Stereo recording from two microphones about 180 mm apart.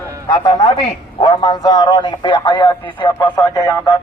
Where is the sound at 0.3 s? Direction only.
25° left (ahead or behind).